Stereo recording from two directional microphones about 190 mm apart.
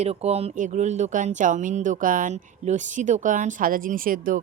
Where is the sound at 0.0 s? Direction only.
35° right (ahead or behind).